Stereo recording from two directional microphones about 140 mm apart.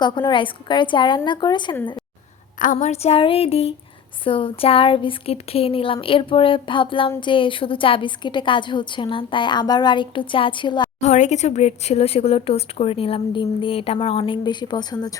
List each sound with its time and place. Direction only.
0.0 s a woman's voice: 35° left (ahead or behind)
2.7 s a woman's voice: 50° left (ahead or behind)
11.0 s speech: 55° left (ahead or behind); by 15.1 s 30° left (ahead or behind)